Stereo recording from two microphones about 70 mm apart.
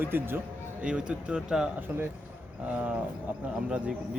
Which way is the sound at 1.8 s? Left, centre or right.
Right.